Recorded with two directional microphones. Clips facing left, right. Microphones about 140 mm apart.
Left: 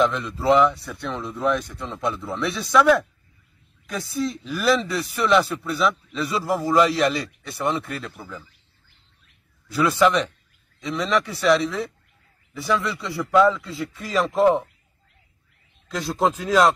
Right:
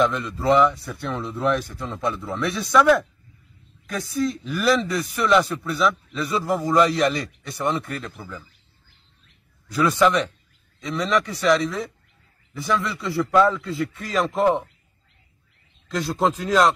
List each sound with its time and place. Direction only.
0.0 s speech: centre (ahead or behind)
9.7 s speech: centre (ahead or behind)
15.9 s speech: centre (ahead or behind)